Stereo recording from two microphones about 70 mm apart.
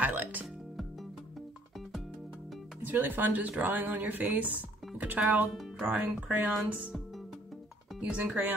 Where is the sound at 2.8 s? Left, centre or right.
Right.